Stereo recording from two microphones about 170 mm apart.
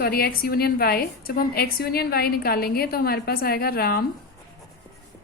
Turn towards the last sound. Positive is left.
turn(degrees=65)  # may be behind; listen again after turning